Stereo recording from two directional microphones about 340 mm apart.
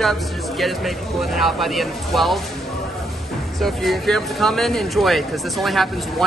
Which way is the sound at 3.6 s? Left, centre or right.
Centre.